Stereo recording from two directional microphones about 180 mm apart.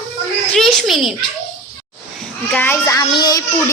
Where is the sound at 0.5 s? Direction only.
Centre (ahead or behind).